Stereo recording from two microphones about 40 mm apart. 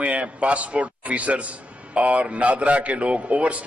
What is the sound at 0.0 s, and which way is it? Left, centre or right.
A man's voice, right.